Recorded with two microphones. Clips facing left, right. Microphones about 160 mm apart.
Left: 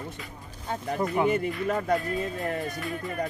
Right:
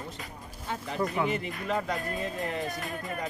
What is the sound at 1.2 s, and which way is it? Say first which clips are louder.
Speech: left 6 dB; 45° left (ahead or behind).